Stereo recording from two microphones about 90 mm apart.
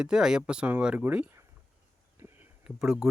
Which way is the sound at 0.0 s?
5° right (ahead or behind).